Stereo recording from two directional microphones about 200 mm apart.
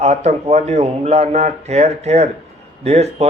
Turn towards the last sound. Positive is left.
turn(degrees=-30)  # may be behind; listen again after turning